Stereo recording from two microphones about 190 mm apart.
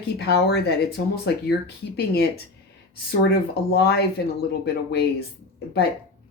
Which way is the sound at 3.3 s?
60° left (ahead or behind).